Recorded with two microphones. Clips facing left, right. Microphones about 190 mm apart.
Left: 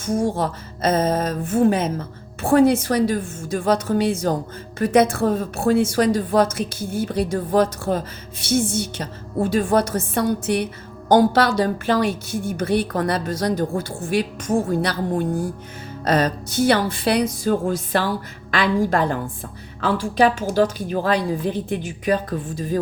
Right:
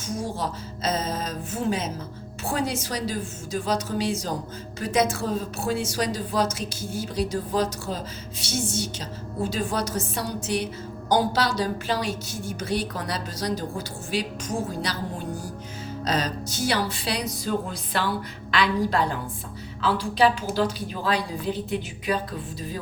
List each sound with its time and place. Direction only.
0.0 s a woman's voice: 55° left (ahead or behind)